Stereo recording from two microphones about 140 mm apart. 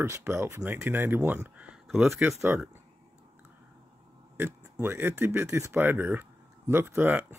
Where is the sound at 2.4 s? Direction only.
15° right (ahead or behind).